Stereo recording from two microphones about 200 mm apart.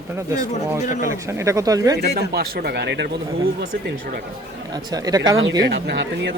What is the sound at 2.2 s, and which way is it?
Speech, 50° right (ahead or behind).